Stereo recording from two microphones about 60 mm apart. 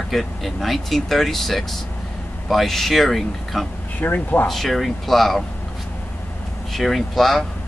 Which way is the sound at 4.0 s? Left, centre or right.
Left.